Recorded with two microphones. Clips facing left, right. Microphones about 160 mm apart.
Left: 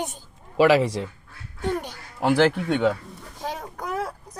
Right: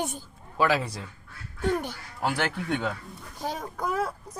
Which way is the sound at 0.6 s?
90° left.